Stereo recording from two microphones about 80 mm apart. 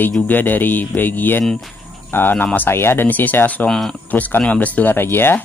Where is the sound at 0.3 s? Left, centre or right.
Left.